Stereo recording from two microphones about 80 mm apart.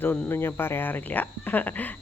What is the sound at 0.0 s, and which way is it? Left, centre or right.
Speech, left.